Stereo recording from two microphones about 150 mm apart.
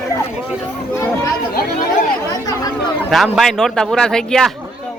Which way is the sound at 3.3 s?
Centre (ahead or behind).